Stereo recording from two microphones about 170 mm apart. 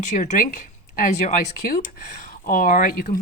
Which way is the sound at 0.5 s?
55° left (ahead or behind).